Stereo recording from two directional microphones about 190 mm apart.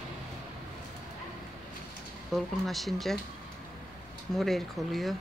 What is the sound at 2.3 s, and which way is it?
Speech, centre (ahead or behind).